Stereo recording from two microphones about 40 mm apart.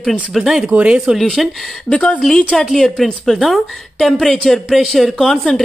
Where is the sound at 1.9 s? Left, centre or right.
Left.